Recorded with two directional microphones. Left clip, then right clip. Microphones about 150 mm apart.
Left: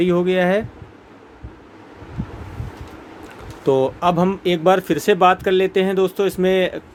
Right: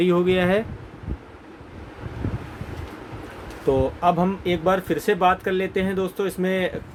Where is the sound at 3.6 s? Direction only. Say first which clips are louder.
Left 3 dB; 85° left.